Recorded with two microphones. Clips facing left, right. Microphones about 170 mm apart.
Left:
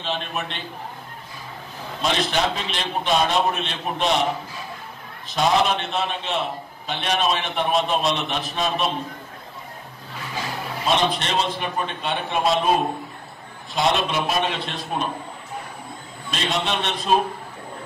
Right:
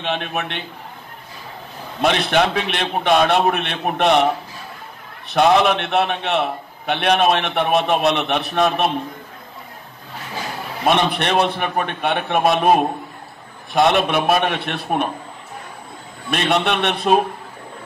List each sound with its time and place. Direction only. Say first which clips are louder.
0.0 s a man's voice: right 4 dB; 60° right (ahead or behind)
2.0 s a man's voice: right 6 dB; 65° right (ahead or behind)
10.8 s a man's voice: right 4 dB; 60° right (ahead or behind)
16.3 s a man's voice: right 6 dB; 60° right (ahead or behind)